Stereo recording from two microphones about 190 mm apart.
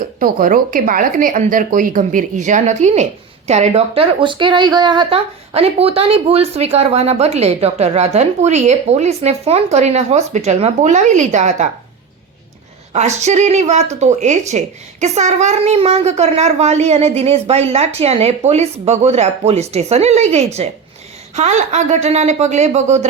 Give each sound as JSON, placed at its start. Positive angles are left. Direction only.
{"t": 0.2, "sound": "speech", "side_deg": -45}
{"t": 12.9, "sound": "speech", "side_deg": -35}